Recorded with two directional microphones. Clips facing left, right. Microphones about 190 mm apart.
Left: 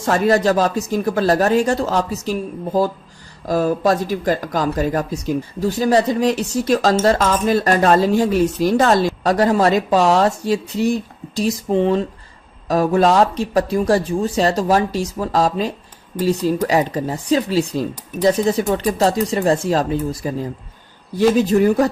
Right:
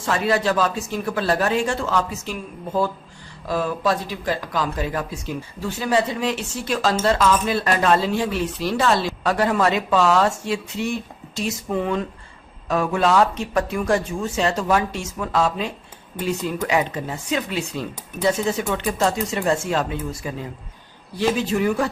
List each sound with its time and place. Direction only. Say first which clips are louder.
0.0 s speech: left 5 dB; 40° left (ahead or behind)